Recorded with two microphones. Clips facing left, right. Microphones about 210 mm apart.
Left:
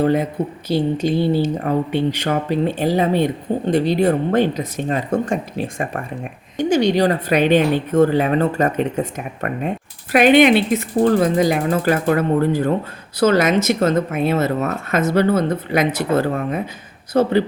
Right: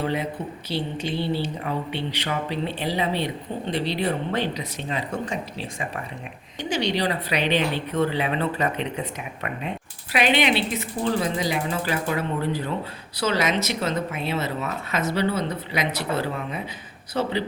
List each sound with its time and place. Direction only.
0.0 s speech: 45° left (ahead or behind)